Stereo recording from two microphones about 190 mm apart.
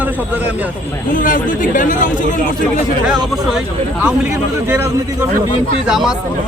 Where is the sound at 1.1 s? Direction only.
45° left (ahead or behind).